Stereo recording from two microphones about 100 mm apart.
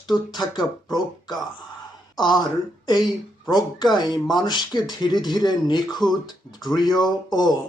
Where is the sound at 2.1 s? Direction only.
45° left (ahead or behind).